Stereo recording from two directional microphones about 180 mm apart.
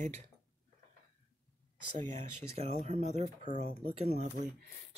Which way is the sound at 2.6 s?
35° right (ahead or behind).